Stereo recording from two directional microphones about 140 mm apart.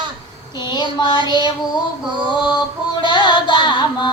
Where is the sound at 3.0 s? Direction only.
35° left (ahead or behind).